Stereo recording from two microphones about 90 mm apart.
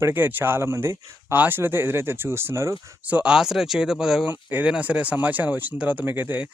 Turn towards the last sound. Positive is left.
turn(degrees=-20)  # may be behind; listen again after turning